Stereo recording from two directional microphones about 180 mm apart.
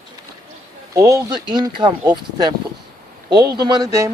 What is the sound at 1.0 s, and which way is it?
Speech, 20° right (ahead or behind).